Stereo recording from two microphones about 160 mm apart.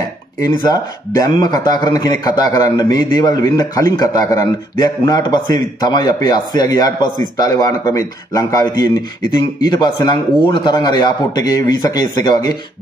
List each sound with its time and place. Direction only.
0.4 s speech: 25° left (ahead or behind)